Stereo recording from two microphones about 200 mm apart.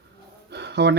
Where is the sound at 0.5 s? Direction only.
60° right (ahead or behind).